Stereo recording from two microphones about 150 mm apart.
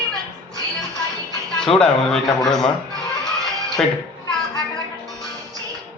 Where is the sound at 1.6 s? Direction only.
5° left (ahead or behind).